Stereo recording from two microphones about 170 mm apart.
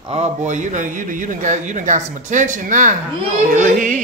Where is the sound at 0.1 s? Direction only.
45° right (ahead or behind).